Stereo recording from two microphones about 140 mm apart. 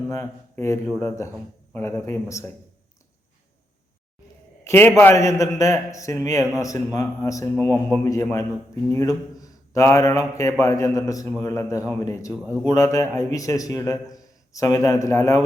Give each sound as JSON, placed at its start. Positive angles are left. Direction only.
{"t": 0.1, "sound": "a man's voice", "side_deg": 20}
{"t": 4.6, "sound": "a man's voice", "side_deg": 15}
{"t": 7.7, "sound": "a man's voice", "side_deg": 5}
{"t": 8.0, "sound": "a man's voice", "side_deg": 25}